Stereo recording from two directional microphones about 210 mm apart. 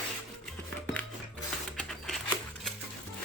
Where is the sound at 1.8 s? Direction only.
Centre (ahead or behind).